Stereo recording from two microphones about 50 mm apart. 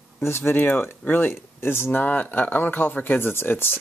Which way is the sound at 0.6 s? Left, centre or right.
Left.